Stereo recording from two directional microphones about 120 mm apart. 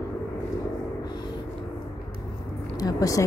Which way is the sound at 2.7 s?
30° left (ahead or behind).